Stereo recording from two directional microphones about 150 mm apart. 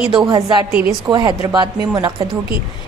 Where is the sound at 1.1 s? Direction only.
25° right (ahead or behind).